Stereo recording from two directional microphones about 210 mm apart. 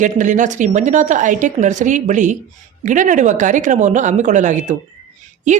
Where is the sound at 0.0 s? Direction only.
35° right (ahead or behind).